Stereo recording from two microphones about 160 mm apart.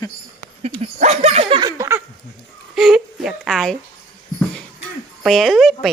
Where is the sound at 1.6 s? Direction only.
15° right (ahead or behind).